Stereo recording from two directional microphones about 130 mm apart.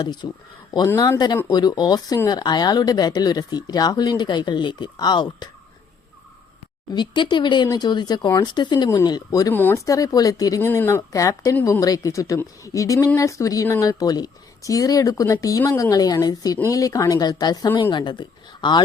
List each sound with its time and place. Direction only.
0.0 s speech: 35° left (ahead or behind)
6.9 s a woman's voice: 35° left (ahead or behind)
9.5 s speech: 15° left (ahead or behind)
9.8 s a woman's voice: 25° left (ahead or behind)